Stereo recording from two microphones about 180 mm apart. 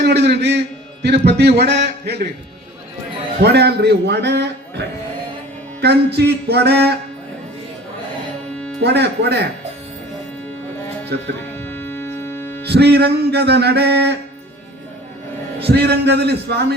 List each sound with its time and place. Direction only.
0.0 s a sound: 70° right (ahead or behind)
1.0 s music: 65° right (ahead or behind)
3.4 s music: 65° right (ahead or behind)
8.8 s music: 65° right (ahead or behind)
11.1 s music: 65° right (ahead or behind)
11.6 s music: 10° left (ahead or behind)
12.6 s music: 65° right (ahead or behind)
15.6 s music: 65° right (ahead or behind)